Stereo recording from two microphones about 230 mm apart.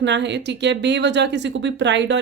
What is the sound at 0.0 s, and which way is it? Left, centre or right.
Speech, right.